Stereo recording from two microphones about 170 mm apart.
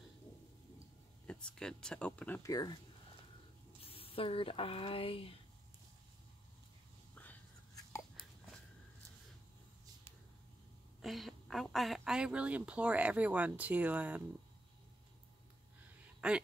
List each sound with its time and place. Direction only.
1.2 s speech: 5° left (ahead or behind)
2.5 s speech: 25° left (ahead or behind)
3.8 s speech: 35° left (ahead or behind)
11.0 s a woman's voice: centre (ahead or behind)
16.2 s speech: 5° right (ahead or behind)